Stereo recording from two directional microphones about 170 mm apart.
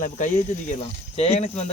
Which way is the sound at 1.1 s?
40° left (ahead or behind).